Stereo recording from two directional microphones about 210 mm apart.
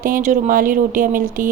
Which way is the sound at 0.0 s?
40° right (ahead or behind).